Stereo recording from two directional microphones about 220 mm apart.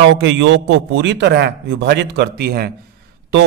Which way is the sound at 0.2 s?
55° right (ahead or behind).